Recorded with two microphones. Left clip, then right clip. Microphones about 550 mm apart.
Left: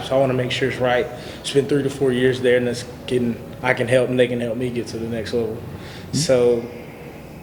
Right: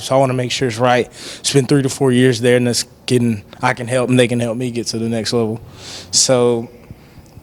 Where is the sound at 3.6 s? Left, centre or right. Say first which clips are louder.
Right 1 dB; right.